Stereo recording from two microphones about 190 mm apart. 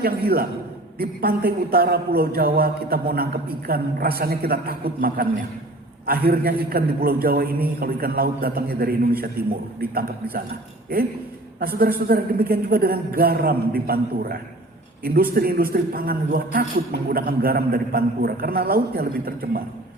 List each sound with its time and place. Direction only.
0.0 s a man's voice: 50° right (ahead or behind)
11.6 s a man's voice: 50° right (ahead or behind)